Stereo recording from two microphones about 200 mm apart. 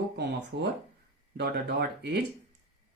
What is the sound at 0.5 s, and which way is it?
Speech, 55° right (ahead or behind).